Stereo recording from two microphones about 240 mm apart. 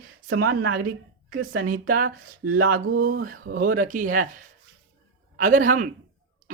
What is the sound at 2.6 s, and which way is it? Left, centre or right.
Speech, right.